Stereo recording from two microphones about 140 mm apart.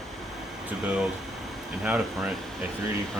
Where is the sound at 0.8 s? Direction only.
5° right (ahead or behind).